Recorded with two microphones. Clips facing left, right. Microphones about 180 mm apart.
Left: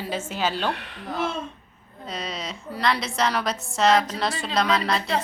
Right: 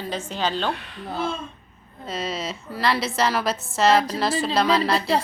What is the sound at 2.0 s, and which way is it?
A woman's voice, 5° right (ahead or behind).